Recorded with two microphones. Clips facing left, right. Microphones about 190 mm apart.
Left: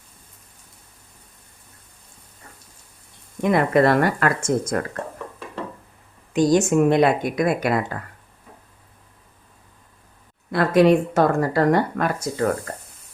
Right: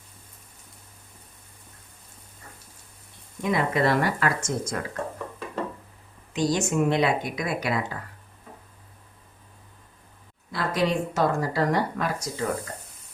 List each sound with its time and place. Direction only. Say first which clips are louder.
3.4 s speech: left 6 dB; 55° left (ahead or behind)
6.3 s speech: left 7 dB; 50° left (ahead or behind)
10.5 s speech: left 10 dB; 60° left (ahead or behind)